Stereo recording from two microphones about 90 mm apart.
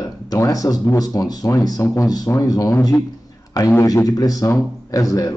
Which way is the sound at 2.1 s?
45° left (ahead or behind).